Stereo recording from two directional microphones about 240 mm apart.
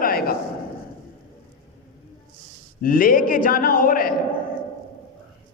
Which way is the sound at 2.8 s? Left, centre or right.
Left.